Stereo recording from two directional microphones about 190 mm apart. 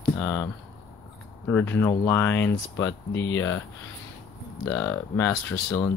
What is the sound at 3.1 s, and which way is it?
Speech, 80° left.